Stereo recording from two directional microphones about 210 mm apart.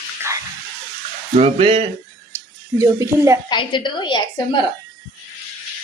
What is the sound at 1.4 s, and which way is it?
Speech, 30° right (ahead or behind).